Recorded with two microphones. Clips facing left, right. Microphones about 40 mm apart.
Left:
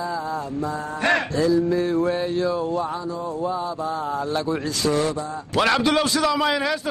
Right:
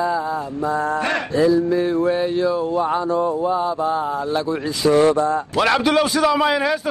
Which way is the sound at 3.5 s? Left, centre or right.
Right.